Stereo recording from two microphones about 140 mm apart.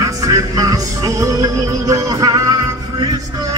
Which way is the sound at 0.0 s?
25° right (ahead or behind).